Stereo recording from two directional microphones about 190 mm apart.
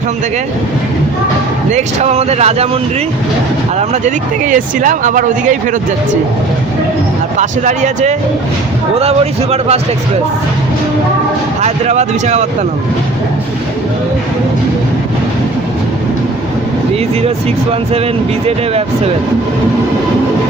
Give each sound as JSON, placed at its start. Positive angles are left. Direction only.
{"t": 1.7, "sound": "speech", "side_deg": -35}
{"t": 3.8, "sound": "speech", "side_deg": -40}
{"t": 7.3, "sound": "speech", "side_deg": -40}
{"t": 11.6, "sound": "speech", "side_deg": -35}
{"t": 17.2, "sound": "speech", "side_deg": -30}